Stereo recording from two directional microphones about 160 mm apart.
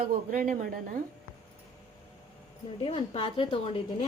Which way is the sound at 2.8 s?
35° left (ahead or behind).